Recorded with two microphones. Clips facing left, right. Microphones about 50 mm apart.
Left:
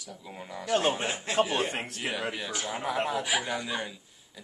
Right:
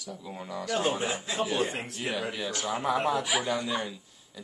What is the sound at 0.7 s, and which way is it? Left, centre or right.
Speech, left.